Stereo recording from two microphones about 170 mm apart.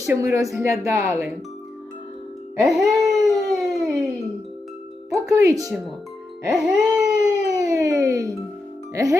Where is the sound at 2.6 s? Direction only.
Centre (ahead or behind).